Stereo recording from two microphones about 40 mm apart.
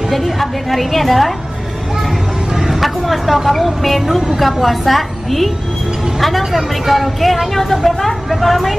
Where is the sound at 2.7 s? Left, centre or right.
Centre.